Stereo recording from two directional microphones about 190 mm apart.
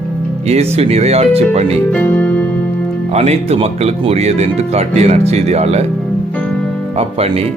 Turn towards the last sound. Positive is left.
turn(degrees=-30)  # may be behind; listen again after turning